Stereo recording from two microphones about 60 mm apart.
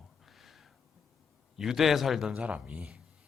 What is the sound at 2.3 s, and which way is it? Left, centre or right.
Speech, right.